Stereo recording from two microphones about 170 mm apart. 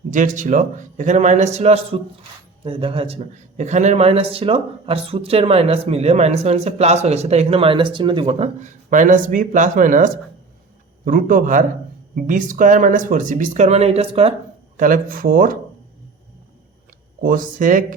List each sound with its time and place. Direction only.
0.1 s speech: 50° right (ahead or behind)
14.8 s speech: 50° right (ahead or behind)
17.2 s speech: 55° right (ahead or behind)